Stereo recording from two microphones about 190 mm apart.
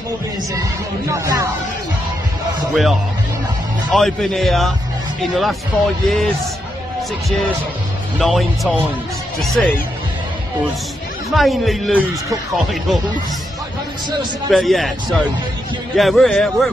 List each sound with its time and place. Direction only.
0.6 s speech: 15° right (ahead or behind)
2.7 s a man's voice: centre (ahead or behind)
8.2 s a man's voice: centre (ahead or behind)
11.3 s a man's voice: centre (ahead or behind)
14.5 s a man's voice: centre (ahead or behind)